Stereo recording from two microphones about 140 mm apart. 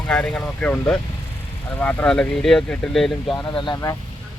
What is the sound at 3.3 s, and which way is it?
Speech, 35° left (ahead or behind).